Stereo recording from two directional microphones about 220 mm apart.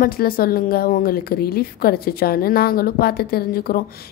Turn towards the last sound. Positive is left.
turn(degrees=40)  # may be behind; listen again after turning